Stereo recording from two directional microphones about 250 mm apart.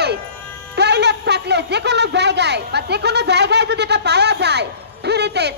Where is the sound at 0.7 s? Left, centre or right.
Right.